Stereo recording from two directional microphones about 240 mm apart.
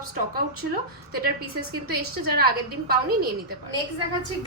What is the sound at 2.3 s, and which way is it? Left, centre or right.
Speech, right.